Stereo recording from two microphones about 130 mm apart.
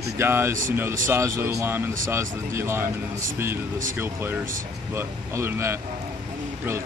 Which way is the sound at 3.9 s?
20° right (ahead or behind).